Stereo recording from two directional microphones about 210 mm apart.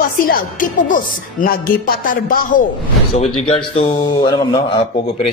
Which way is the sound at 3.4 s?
30° left (ahead or behind).